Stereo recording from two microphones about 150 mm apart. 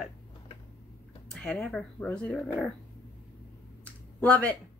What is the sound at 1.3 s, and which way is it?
Speech, 5° left (ahead or behind).